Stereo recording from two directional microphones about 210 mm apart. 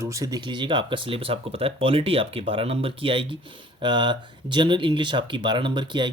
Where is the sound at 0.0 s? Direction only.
15° right (ahead or behind).